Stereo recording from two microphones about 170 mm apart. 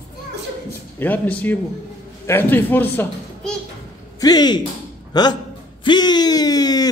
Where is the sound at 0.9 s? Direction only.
10° left (ahead or behind).